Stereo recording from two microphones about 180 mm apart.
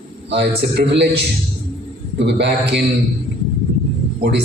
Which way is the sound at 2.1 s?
75° right (ahead or behind).